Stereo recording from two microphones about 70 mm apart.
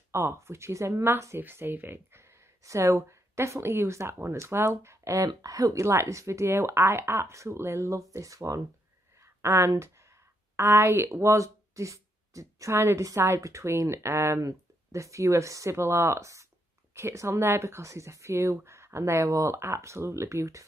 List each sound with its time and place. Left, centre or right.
0.1 s speech: right
2.6 s speech: right
5.3 s speech: right